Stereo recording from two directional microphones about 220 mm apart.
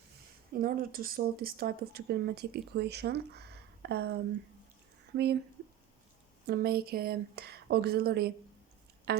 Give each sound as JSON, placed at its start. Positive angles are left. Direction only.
{"t": 0.5, "sound": "speech", "side_deg": -40}
{"t": 5.1, "sound": "speech", "side_deg": -45}
{"t": 6.5, "sound": "speech", "side_deg": -45}
{"t": 9.1, "sound": "music", "side_deg": -45}